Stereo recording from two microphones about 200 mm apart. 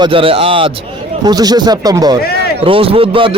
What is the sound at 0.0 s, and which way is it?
A man's voice, 25° right (ahead or behind).